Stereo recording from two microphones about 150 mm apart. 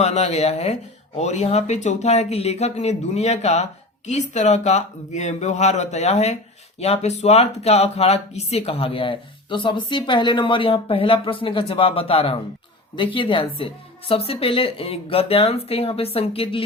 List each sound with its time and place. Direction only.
0.0 s speech: 45° left (ahead or behind)